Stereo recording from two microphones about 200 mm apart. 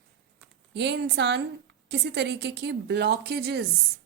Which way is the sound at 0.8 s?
60° right (ahead or behind).